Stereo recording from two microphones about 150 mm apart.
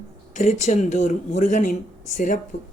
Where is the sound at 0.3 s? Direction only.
55° left (ahead or behind).